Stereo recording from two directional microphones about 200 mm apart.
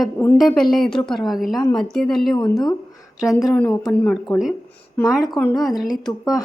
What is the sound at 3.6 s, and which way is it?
Speech, 15° left (ahead or behind).